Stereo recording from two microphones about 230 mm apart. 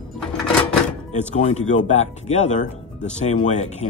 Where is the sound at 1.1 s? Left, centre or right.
Left.